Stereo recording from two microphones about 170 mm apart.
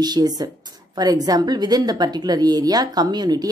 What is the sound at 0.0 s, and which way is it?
A woman's voice, 25° right (ahead or behind).